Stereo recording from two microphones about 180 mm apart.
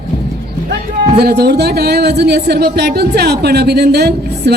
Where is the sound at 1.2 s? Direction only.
60° right (ahead or behind).